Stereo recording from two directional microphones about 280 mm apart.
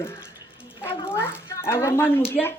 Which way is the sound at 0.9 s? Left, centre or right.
Centre.